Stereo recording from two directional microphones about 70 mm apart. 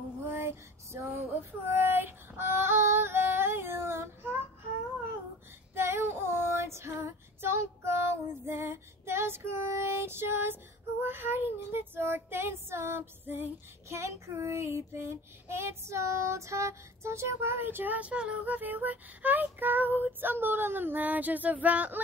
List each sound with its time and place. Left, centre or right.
0.3 s female singing: right
5.8 s female singing: right